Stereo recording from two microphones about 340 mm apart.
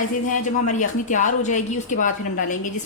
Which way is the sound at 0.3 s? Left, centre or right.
Left.